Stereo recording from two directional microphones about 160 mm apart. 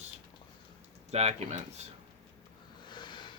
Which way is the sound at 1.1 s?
40° right (ahead or behind).